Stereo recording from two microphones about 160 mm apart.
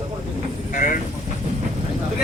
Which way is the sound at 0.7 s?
60° left (ahead or behind).